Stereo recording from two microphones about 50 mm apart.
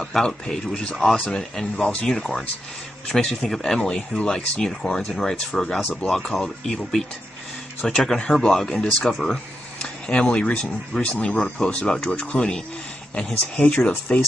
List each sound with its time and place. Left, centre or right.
0.0 s speech: centre
1.3 s speech: centre
3.9 s speech: left; by 6.5 s centre
6.7 s speech: centre
9.8 s speech: left
11.6 s speech: centre